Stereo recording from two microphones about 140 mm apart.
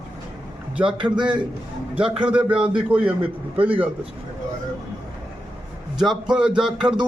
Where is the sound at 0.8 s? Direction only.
10° right (ahead or behind).